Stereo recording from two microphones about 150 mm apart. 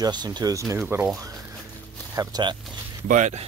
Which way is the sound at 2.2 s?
30° right (ahead or behind).